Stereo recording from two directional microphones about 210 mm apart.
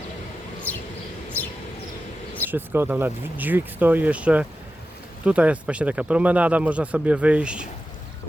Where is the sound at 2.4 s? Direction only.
10° right (ahead or behind).